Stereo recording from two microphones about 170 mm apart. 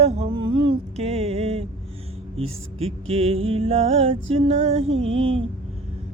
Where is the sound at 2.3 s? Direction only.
35° right (ahead or behind).